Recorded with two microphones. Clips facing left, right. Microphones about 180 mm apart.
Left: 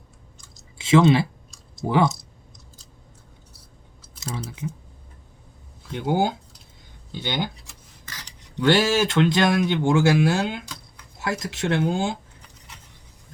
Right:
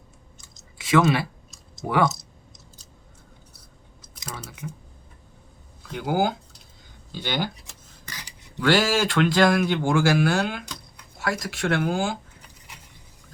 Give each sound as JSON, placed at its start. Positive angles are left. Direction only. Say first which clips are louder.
{"t": 0.8, "sound": "speech", "louder": "left 3 dB", "side_deg": 25}
{"t": 4.3, "sound": "speech", "louder": "left 5 dB", "side_deg": 25}
{"t": 5.9, "sound": "speech", "louder": "left 1 dB", "side_deg": 25}
{"t": 8.0, "sound": "cutlery", "louder": "right 1 dB", "side_deg": -10}
{"t": 8.6, "sound": "speech", "louder": "left 2 dB", "side_deg": 20}